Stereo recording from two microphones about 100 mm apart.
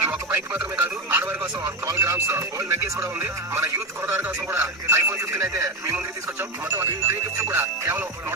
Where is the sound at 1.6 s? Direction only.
30° right (ahead or behind).